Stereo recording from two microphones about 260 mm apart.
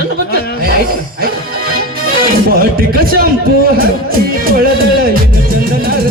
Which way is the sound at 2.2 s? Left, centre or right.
Right.